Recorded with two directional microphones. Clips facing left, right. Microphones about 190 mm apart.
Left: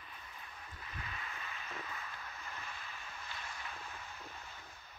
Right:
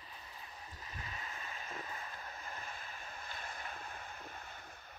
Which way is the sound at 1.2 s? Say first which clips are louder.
Even; 40° right (ahead or behind).